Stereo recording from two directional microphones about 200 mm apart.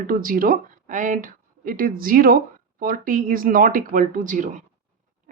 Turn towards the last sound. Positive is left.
turn(degrees=-40)  # may be behind; listen again after turning